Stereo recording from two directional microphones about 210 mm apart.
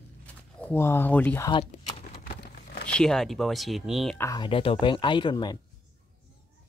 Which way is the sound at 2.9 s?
5° left (ahead or behind).